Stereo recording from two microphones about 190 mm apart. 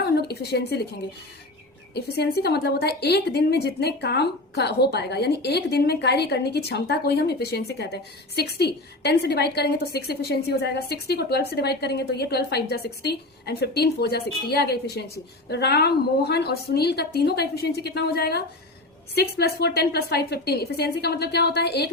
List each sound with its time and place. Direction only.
0.2 s a woman's voice: 60° left (ahead or behind)
2.1 s a woman's voice: 60° left (ahead or behind)